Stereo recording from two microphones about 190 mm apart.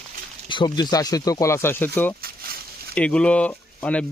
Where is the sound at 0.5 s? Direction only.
20° left (ahead or behind).